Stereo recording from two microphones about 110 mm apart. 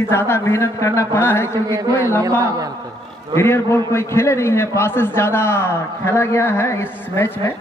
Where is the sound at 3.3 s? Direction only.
25° left (ahead or behind).